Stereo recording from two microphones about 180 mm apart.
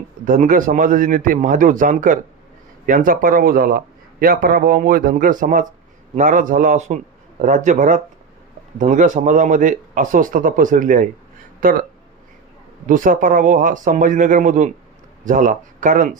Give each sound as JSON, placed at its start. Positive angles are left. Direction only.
{"t": 0.3, "sound": "a man's voice", "side_deg": -45}
{"t": 12.9, "sound": "a man's voice", "side_deg": -45}